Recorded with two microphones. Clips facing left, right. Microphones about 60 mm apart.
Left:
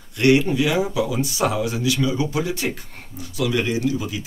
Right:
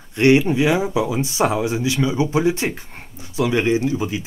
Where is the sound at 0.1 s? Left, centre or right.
Right.